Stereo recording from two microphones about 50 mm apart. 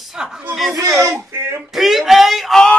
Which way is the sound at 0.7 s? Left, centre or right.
Right.